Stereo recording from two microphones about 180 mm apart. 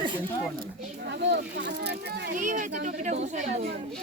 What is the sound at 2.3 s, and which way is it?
A woman's voice, 45° right (ahead or behind).